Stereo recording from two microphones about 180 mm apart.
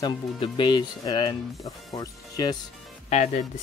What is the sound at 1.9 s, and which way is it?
Music, 20° left (ahead or behind).